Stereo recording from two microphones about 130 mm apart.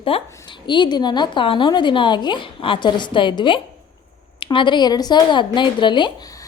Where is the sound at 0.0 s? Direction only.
40° left (ahead or behind).